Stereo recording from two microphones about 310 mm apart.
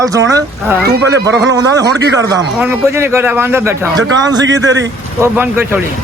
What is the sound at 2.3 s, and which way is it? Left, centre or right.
A man's voice, centre.